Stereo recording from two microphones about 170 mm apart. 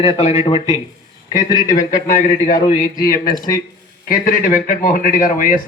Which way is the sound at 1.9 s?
50° left (ahead or behind).